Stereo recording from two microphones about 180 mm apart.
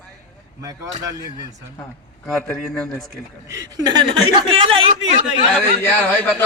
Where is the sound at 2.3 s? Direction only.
Centre (ahead or behind).